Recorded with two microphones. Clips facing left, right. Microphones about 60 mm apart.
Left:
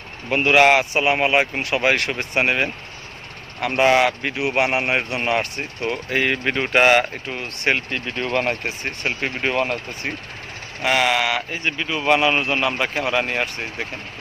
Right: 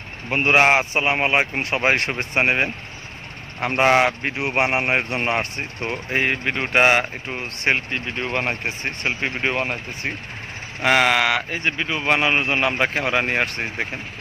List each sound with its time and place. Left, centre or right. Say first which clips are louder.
0.3 s speech: left 2 dB; right
7.2 s speech: even; right
10.8 s speech: right 2 dB; right